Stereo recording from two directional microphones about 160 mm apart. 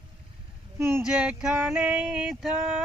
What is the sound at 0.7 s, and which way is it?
Speech, 15° right (ahead or behind).